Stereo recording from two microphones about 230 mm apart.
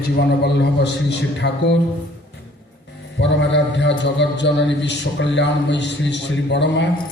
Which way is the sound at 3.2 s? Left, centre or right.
Left.